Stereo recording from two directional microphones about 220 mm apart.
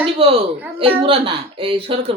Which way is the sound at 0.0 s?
25° right (ahead or behind).